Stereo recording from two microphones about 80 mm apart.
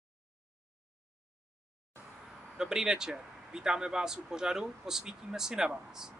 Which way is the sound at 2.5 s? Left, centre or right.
Centre.